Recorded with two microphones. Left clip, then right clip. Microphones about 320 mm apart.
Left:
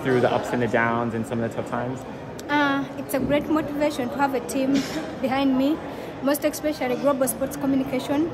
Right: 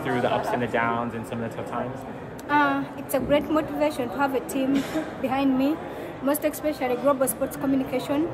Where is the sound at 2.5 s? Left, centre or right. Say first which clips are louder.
Even; centre.